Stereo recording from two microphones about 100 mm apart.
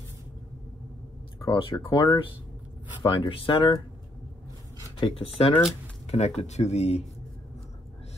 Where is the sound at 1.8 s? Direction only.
60° left (ahead or behind).